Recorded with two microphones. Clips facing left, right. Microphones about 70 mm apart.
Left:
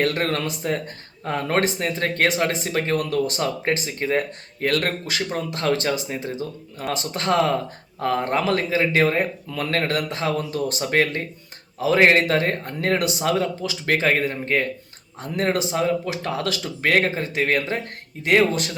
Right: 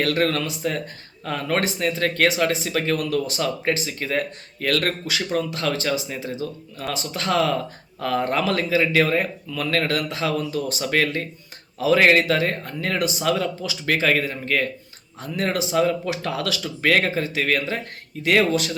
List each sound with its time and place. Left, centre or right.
0.0 s speech: left
5.5 s speech: left
10.8 s speech: left
13.2 s speech: left
15.7 s speech: centre